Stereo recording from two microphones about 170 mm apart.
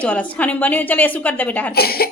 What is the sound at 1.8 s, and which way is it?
Speech, 65° left (ahead or behind).